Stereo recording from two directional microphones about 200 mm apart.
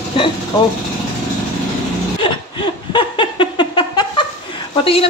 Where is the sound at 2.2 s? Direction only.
25° left (ahead or behind).